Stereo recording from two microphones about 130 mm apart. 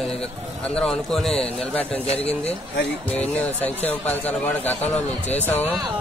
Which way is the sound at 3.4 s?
10° left (ahead or behind).